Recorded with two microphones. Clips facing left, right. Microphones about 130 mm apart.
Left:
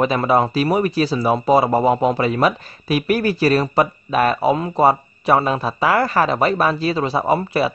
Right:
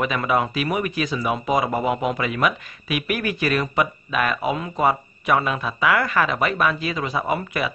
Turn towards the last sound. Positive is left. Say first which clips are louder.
# left 6 dB
turn(degrees=35)  # may be behind; listen again after turning